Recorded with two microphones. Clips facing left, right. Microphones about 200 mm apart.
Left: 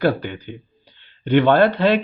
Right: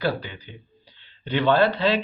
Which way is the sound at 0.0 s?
55° left (ahead or behind).